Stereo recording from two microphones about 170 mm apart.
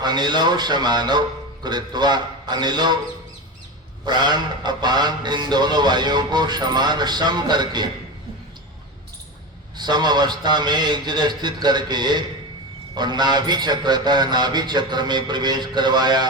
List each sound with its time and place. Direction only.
0.0 s music: 25° right (ahead or behind)
4.0 s music: 25° right (ahead or behind)
9.7 s music: 25° right (ahead or behind)